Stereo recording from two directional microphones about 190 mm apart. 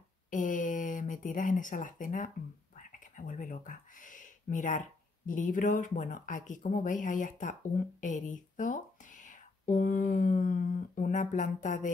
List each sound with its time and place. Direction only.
0.3 s speech: 45° left (ahead or behind)